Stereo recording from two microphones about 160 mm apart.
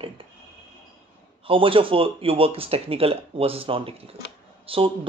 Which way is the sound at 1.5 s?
35° right (ahead or behind).